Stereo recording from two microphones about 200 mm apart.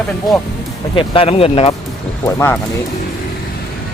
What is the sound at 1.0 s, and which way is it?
Speech, 30° left (ahead or behind).